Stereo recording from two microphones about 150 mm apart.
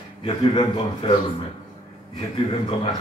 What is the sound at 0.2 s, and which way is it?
Speech, 35° left (ahead or behind).